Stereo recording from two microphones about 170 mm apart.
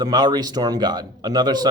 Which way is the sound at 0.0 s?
25° right (ahead or behind).